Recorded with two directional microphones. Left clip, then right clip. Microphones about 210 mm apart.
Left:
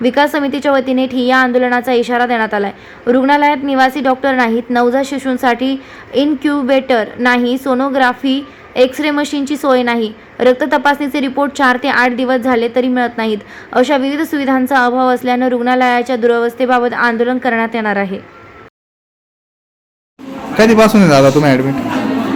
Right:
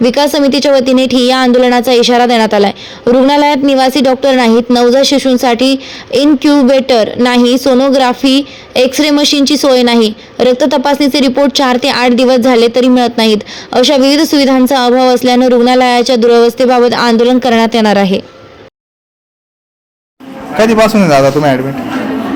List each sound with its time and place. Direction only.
0.0 s a woman's voice: 25° right (ahead or behind)
20.6 s a man's voice: 10° left (ahead or behind)